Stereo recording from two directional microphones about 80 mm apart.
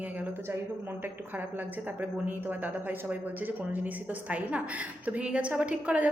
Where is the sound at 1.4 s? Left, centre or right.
Right.